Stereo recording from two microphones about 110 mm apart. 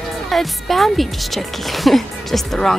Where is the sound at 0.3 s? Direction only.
Centre (ahead or behind).